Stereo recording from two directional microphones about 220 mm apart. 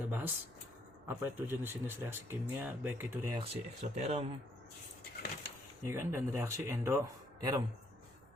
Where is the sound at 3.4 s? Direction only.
25° right (ahead or behind).